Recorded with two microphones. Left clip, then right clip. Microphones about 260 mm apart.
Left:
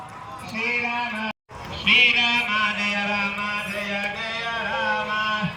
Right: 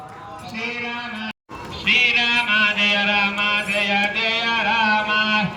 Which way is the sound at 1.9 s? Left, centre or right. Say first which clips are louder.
Even; right.